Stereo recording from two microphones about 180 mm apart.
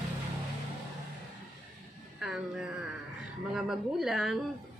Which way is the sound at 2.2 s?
5° right (ahead or behind).